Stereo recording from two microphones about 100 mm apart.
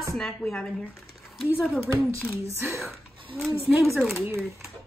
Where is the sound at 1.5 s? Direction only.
5° right (ahead or behind).